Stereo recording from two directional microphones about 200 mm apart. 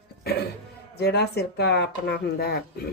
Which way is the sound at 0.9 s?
55° left (ahead or behind).